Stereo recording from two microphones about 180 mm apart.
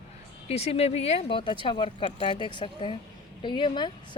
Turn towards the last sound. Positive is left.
turn(degrees=25)  # may be behind; listen again after turning